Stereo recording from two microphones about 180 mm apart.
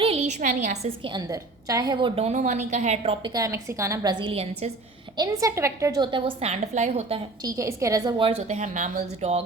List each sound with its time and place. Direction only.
0.0 s a woman's voice: 35° right (ahead or behind)
1.1 s a woman's voice: 20° right (ahead or behind); by 3.2 s 40° right (ahead or behind)
3.2 s a woman's voice: 20° right (ahead or behind)
5.1 s a woman's voice: 20° right (ahead or behind); by 7.2 s 35° right (ahead or behind)
7.4 s a woman's voice: 15° right (ahead or behind)
8.2 s a woman's voice: 35° right (ahead or behind)